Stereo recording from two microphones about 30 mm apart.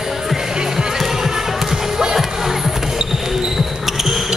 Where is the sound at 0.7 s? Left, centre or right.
Centre.